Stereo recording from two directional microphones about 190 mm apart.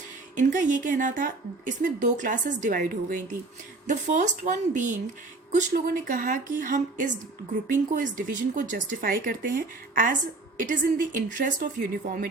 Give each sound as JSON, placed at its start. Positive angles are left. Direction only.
{"t": 0.3, "sound": "a woman's voice", "side_deg": -40}